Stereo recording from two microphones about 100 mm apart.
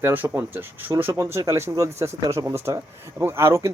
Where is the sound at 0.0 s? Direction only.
20° right (ahead or behind).